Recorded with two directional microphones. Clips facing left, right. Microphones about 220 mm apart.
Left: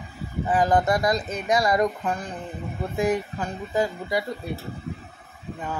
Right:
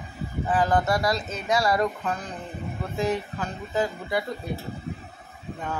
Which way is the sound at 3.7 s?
10° left (ahead or behind).